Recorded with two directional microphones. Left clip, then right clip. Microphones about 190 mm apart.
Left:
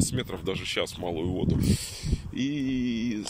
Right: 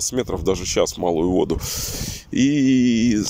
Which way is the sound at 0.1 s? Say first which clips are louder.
Right 10 dB; 30° right (ahead or behind).